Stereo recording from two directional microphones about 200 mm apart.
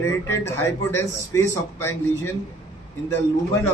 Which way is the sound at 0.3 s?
15° left (ahead or behind).